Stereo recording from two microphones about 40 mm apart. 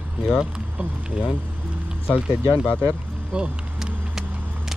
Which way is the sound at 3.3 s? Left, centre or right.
Right.